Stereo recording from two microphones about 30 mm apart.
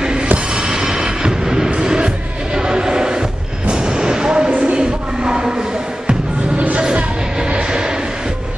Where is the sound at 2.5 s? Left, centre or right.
Right.